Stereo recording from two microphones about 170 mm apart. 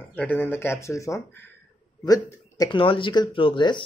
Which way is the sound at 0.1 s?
10° left (ahead or behind).